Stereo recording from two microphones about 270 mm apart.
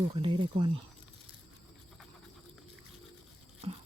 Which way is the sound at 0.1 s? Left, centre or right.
Centre.